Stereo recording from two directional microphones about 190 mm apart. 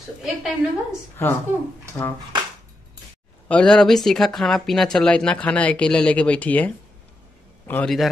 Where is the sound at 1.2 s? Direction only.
10° left (ahead or behind).